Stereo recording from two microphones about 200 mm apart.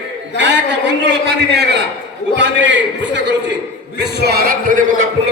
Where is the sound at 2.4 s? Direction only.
65° right (ahead or behind).